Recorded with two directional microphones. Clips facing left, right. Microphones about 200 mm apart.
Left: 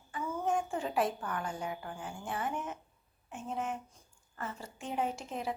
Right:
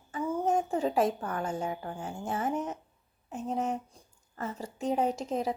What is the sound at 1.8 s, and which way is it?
A woman's voice, 35° right (ahead or behind).